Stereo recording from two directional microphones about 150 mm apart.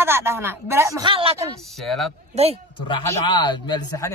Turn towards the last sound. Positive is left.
turn(degrees=25)  # may be behind; listen again after turning